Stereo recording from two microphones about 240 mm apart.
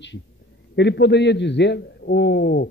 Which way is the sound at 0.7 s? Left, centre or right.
Left.